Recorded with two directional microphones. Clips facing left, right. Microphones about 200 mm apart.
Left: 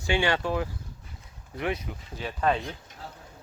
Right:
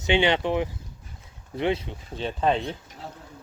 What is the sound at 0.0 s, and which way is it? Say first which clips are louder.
Speech: right 4 dB; 20° right (ahead or behind).